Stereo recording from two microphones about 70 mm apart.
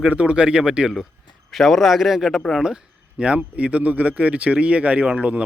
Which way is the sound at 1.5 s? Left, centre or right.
Centre.